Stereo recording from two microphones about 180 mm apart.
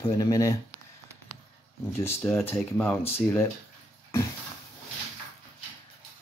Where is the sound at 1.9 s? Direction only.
15° left (ahead or behind).